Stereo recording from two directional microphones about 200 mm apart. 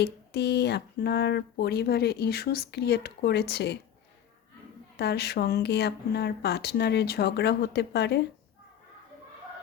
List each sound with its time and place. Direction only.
0.0 s speech: 55° left (ahead or behind)
4.9 s speech: 55° left (ahead or behind)